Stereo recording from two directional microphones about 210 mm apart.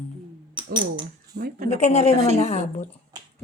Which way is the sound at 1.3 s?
45° right (ahead or behind).